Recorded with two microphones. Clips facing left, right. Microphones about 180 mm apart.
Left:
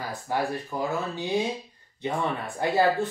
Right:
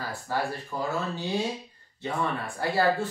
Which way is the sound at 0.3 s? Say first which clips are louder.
Left 3 dB; 15° left (ahead or behind).